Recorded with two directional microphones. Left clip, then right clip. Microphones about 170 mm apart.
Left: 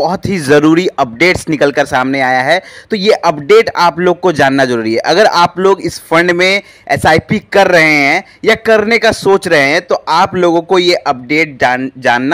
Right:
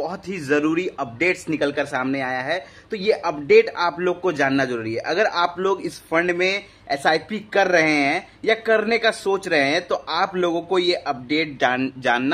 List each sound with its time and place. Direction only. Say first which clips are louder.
0.0 s a man's voice: left 14 dB; 45° left (ahead or behind)